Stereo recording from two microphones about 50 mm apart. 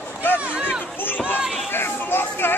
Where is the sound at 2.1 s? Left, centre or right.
Left.